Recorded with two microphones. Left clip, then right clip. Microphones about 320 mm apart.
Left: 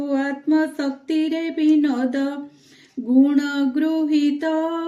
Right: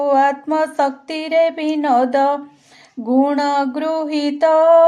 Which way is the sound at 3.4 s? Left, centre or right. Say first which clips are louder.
Right 4 dB; centre.